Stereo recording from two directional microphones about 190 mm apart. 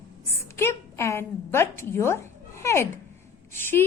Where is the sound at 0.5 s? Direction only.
15° left (ahead or behind).